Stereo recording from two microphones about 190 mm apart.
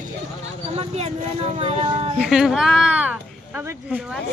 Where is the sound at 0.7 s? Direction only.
35° right (ahead or behind).